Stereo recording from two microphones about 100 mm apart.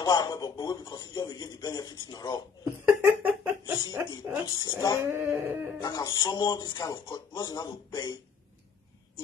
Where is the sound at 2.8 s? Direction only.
20° right (ahead or behind).